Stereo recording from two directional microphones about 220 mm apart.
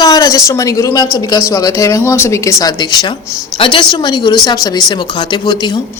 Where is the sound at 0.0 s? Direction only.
15° left (ahead or behind).